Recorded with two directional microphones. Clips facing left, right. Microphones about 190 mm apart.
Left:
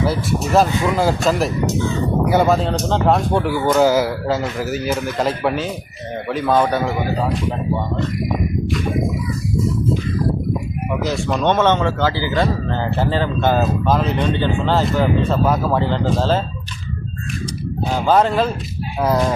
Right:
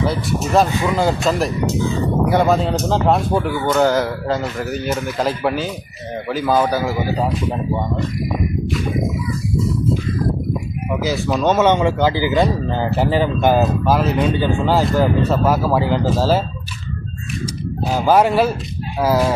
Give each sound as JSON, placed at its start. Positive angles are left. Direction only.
{"t": 0.0, "sound": "a man's voice", "side_deg": 0}
{"t": 11.0, "sound": "speech", "side_deg": -5}
{"t": 17.8, "sound": "a man's voice", "side_deg": -10}